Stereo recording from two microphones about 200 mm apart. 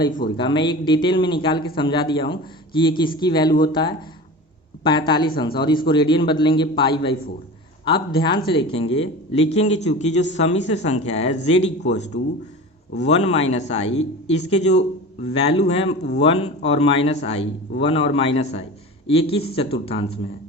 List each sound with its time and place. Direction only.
0.3 s a man's voice: 25° left (ahead or behind)